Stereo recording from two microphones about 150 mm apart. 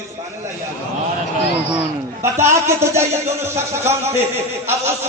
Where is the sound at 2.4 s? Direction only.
15° right (ahead or behind).